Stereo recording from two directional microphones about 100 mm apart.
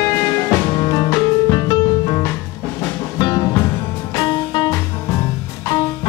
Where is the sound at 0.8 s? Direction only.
35° left (ahead or behind).